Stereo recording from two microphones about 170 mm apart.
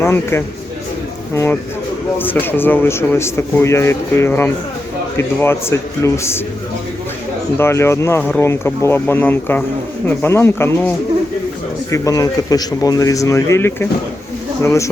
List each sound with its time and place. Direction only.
0.0 s a man's voice: 15° left (ahead or behind)
7.6 s speech: 15° left (ahead or behind)